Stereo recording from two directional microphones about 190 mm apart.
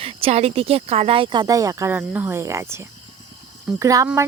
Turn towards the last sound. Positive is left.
turn(degrees=-15)  # may be behind; listen again after turning